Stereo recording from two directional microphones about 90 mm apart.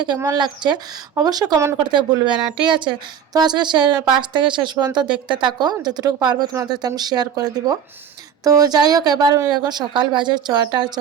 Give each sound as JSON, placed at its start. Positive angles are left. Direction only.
{"t": 0.3, "sound": "a woman's voice", "side_deg": -55}
{"t": 1.8, "sound": "a woman's voice", "side_deg": -55}
{"t": 3.3, "sound": "a woman's voice", "side_deg": -50}